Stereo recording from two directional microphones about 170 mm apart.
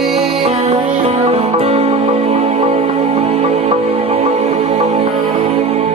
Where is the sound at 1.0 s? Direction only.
35° right (ahead or behind).